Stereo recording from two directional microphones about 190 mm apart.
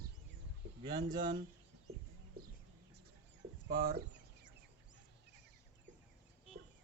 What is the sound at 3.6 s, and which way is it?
Speech, 50° right (ahead or behind).